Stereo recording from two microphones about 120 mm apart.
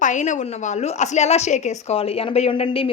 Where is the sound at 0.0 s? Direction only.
90° left.